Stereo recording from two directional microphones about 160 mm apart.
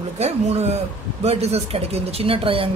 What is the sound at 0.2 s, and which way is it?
A woman's voice, 40° right (ahead or behind).